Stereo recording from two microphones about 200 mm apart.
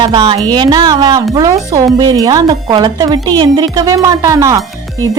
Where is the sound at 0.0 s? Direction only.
20° right (ahead or behind).